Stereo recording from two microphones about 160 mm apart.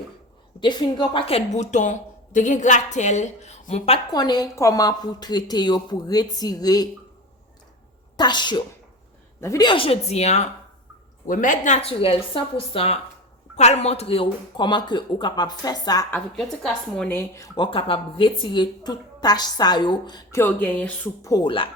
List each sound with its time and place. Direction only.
0.6 s a woman's voice: 30° left (ahead or behind)
4.1 s a woman's voice: 25° left (ahead or behind)
8.1 s a woman's voice: 25° left (ahead or behind); by 10.5 s 45° left (ahead or behind)
11.3 s a woman's voice: 55° left (ahead or behind); by 16.0 s 25° left (ahead or behind)
16.9 s a woman's voice: 5° left (ahead or behind)
17.2 s a woman's voice: 20° left (ahead or behind)
17.7 s a woman's voice: 35° left (ahead or behind)
20.4 s music: 10° left (ahead or behind)
21.2 s a woman's voice: 20° left (ahead or behind)